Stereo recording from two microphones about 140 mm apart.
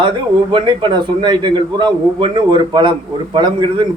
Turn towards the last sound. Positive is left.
turn(degrees=-35)  # may be behind; listen again after turning